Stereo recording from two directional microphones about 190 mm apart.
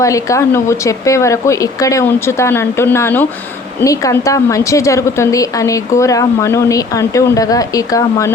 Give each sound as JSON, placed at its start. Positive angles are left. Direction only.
{"t": 0.0, "sound": "a woman's voice", "side_deg": 15}